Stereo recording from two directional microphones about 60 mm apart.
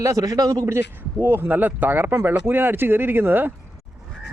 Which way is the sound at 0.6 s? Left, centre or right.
Right.